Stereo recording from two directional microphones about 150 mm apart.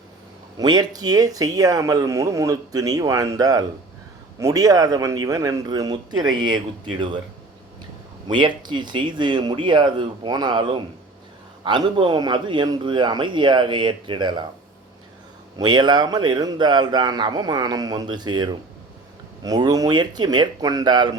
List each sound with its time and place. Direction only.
0.5 s speech: 25° right (ahead or behind)
8.3 s speech: 30° right (ahead or behind)
15.5 s speech: 30° right (ahead or behind)